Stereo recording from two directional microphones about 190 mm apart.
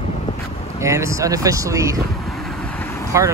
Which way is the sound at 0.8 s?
15° right (ahead or behind).